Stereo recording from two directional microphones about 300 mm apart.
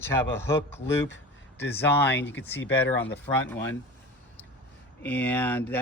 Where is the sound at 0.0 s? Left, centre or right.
Centre.